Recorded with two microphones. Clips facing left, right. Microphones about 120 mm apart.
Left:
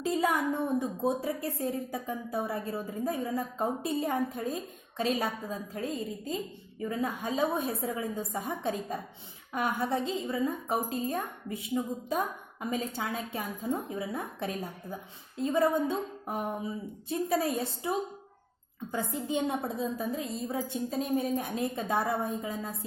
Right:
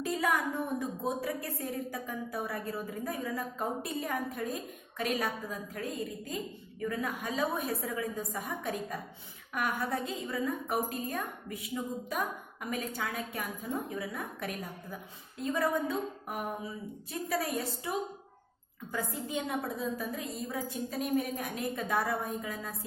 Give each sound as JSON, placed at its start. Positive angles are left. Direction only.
{"t": 0.0, "sound": "a woman's voice", "side_deg": 25}